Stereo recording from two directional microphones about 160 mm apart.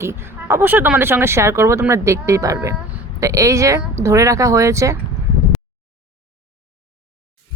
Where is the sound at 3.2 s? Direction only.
20° right (ahead or behind).